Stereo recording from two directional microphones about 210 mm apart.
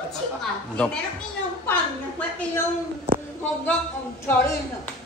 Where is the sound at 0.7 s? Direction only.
5° left (ahead or behind).